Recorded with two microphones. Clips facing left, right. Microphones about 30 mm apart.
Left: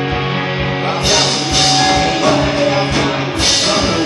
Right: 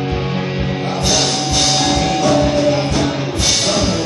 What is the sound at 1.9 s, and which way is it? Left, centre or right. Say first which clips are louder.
Music: left 2 dB; left.